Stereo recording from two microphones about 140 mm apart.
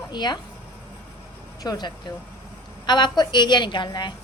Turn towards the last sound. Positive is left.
turn(degrees=35)  # may be behind; listen again after turning